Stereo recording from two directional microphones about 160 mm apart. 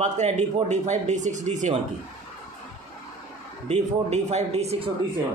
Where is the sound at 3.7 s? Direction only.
45° right (ahead or behind).